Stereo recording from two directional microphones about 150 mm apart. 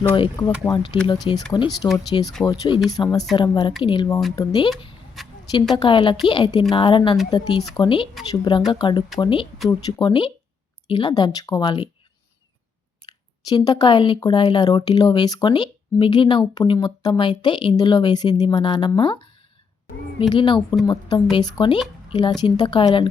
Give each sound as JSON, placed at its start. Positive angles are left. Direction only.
{"t": 0.4, "sound": "speech", "side_deg": 30}
{"t": 5.2, "sound": "a sound", "side_deg": 0}
{"t": 5.7, "sound": "speech", "side_deg": 35}
{"t": 13.1, "sound": "speech", "side_deg": 25}
{"t": 20.3, "sound": "speech", "side_deg": 30}